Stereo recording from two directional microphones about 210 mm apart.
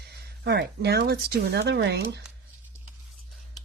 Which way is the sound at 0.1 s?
50° right (ahead or behind).